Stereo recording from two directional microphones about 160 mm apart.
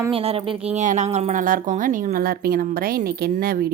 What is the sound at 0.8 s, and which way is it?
A woman's voice, 50° right (ahead or behind).